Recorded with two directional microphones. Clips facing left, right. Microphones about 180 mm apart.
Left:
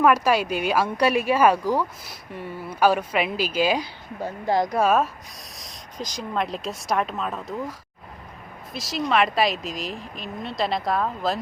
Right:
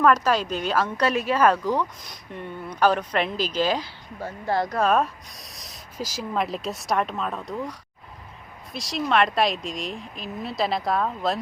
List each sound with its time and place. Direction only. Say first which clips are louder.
0.0 s speech: left 1 dB; 10° left (ahead or behind)